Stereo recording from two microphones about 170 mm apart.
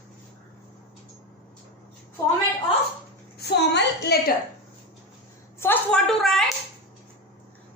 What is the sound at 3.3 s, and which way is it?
Speech, 75° left (ahead or behind).